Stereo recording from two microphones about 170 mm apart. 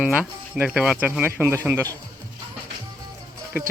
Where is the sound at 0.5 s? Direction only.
5° right (ahead or behind).